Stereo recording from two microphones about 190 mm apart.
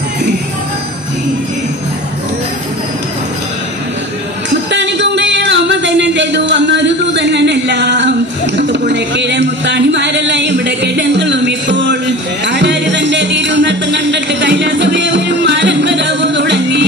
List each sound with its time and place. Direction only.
4.6 s music: 65° right (ahead or behind)
8.5 s a sound: 70° right (ahead or behind)
12.4 s music: 65° right (ahead or behind)